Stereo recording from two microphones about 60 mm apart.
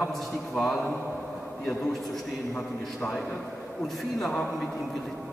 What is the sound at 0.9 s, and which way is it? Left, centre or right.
Speech, left.